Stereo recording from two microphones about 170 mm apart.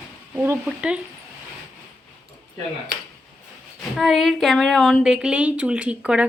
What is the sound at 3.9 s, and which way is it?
A woman's voice, centre (ahead or behind).